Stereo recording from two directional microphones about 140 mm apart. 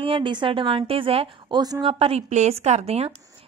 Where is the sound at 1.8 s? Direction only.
40° right (ahead or behind).